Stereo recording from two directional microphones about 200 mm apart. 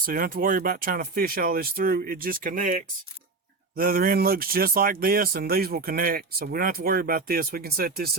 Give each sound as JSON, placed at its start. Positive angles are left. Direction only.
{"t": 0.0, "sound": "speech", "side_deg": -45}